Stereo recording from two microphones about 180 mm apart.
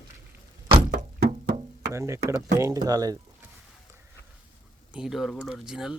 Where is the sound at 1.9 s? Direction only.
15° right (ahead or behind).